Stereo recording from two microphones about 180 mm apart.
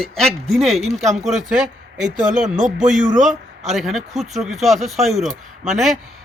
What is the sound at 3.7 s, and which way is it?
Speech, centre (ahead or behind).